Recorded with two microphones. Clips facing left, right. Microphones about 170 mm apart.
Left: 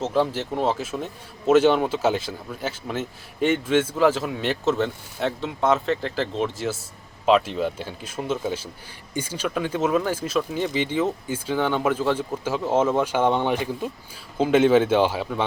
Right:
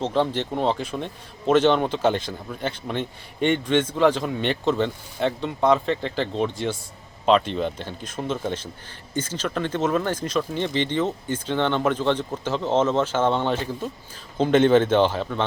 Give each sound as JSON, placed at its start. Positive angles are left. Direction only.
{"t": 0.0, "sound": "a man's voice", "side_deg": 5}